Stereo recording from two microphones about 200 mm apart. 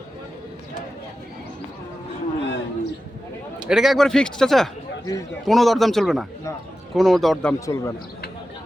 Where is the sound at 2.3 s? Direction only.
60° left (ahead or behind).